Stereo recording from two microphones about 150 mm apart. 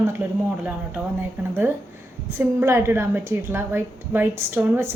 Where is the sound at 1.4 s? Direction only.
10° right (ahead or behind).